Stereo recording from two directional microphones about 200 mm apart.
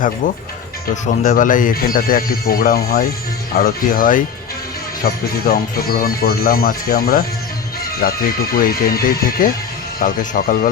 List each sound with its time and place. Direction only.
1.0 s speech: 40° left (ahead or behind)